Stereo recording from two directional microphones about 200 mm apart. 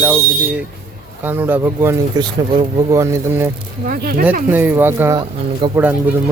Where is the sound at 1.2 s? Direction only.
10° right (ahead or behind).